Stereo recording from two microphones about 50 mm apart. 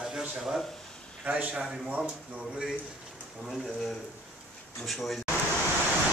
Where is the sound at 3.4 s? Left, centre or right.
Centre.